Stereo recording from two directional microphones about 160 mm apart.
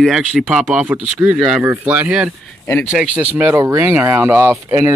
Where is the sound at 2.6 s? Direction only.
15° left (ahead or behind).